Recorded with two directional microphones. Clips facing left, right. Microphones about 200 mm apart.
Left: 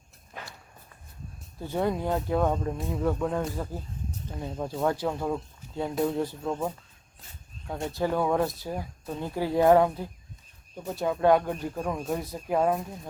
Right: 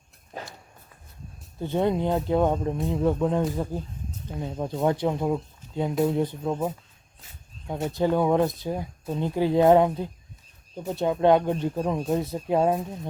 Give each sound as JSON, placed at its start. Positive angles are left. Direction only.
{"t": 0.3, "sound": "walk", "side_deg": -35}
{"t": 1.5, "sound": "speech", "side_deg": -20}
{"t": 7.9, "sound": "speech", "side_deg": -20}